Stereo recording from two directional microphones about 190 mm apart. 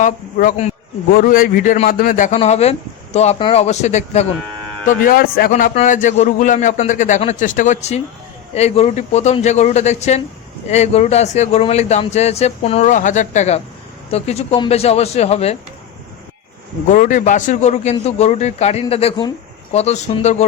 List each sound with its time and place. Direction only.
0.0 s a man's voice: 45° left (ahead or behind)
4.9 s a man's voice: 50° left (ahead or behind); by 15.5 s 35° left (ahead or behind)
16.9 s a man's voice: 45° left (ahead or behind)